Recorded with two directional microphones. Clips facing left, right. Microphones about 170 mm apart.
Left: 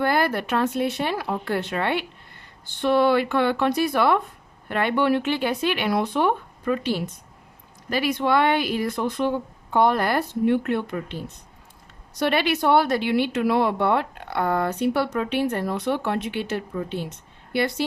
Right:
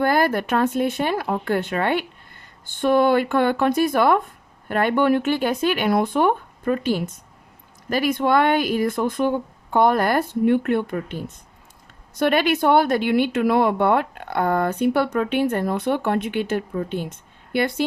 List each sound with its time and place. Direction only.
0.0 s speech: 45° right (ahead or behind)